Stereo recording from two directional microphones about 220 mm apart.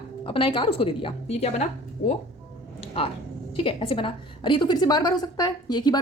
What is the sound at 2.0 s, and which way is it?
Speech, 40° left (ahead or behind).